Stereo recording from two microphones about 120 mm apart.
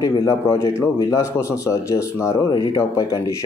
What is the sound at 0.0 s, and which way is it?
Speech, 30° left (ahead or behind).